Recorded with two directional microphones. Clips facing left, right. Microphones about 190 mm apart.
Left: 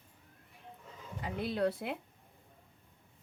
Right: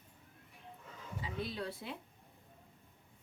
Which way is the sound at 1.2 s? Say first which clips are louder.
Left 8 dB; 60° left (ahead or behind).